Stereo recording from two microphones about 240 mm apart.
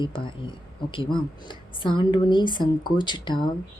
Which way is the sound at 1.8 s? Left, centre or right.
Left.